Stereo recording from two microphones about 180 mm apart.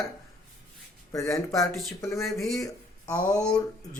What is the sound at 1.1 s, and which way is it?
Speech, 20° left (ahead or behind).